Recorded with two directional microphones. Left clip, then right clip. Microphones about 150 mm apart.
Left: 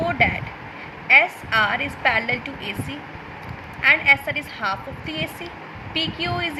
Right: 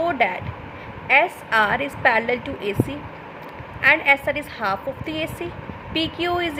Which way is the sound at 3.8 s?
55° right (ahead or behind).